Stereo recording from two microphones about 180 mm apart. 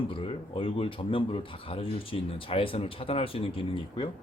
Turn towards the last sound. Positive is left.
turn(degrees=30)  # may be behind; listen again after turning